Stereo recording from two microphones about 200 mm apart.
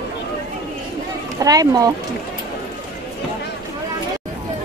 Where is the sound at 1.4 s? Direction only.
15° right (ahead or behind).